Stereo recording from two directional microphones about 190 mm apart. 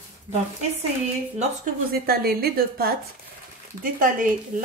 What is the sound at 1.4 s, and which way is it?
Speech, 50° right (ahead or behind).